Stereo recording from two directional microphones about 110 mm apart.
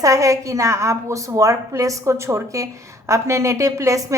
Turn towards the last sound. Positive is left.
turn(degrees=-30)  # may be behind; listen again after turning